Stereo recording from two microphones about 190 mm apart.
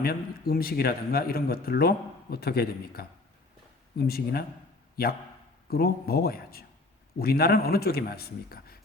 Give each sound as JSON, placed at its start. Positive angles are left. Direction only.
{"t": 0.0, "sound": "speech", "side_deg": 50}